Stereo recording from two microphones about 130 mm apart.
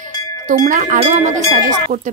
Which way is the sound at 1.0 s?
60° right (ahead or behind).